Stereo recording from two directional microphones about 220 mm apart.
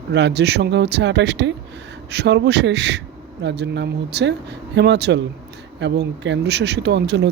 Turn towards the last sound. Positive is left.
turn(degrees=-50)  # may be behind; listen again after turning